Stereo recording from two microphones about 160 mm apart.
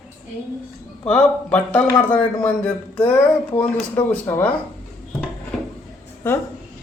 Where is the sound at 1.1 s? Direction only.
5° left (ahead or behind).